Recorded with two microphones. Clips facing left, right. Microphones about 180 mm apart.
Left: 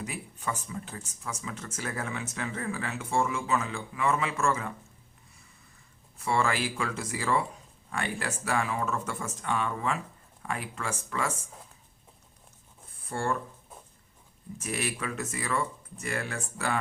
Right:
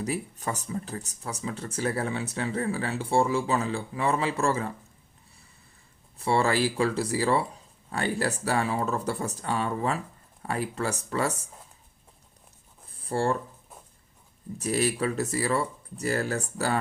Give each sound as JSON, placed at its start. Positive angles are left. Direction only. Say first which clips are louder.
{"t": 0.0, "sound": "speech", "louder": "right 5 dB", "side_deg": -40}
{"t": 6.1, "sound": "speech", "louder": "right 4 dB", "side_deg": -35}
{"t": 12.9, "sound": "a sound", "louder": "right 5 dB", "side_deg": -30}
{"t": 14.6, "sound": "speech", "louder": "right 8 dB", "side_deg": -35}